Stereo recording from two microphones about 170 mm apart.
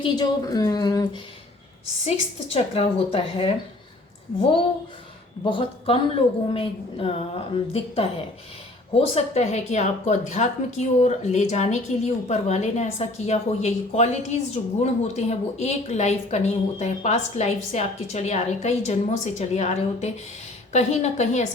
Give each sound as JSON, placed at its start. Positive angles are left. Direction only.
{"t": 0.0, "sound": "speech", "side_deg": 25}
{"t": 2.5, "sound": "a woman's voice", "side_deg": 35}
{"t": 5.5, "sound": "a woman's voice", "side_deg": 30}